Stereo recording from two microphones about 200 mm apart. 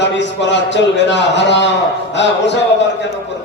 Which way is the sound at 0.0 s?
60° left (ahead or behind).